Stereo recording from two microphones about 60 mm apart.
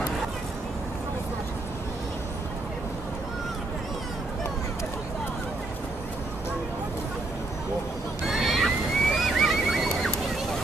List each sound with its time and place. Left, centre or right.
8.3 s neigh: centre